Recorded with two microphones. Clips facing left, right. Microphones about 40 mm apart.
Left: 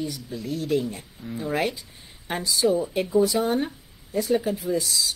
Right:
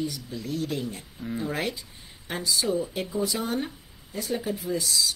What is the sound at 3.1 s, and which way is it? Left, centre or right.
Speech, left.